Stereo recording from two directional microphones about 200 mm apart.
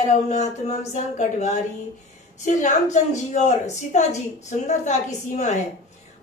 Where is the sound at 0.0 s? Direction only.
35° left (ahead or behind).